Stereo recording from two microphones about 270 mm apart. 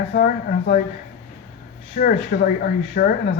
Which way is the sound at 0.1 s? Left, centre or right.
Left.